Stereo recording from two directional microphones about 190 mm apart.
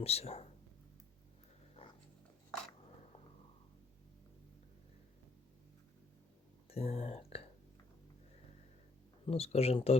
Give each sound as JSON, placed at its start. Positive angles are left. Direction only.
{"t": 0.0, "sound": "speech", "side_deg": 30}
{"t": 6.7, "sound": "speech", "side_deg": 30}
{"t": 9.2, "sound": "speech", "side_deg": 30}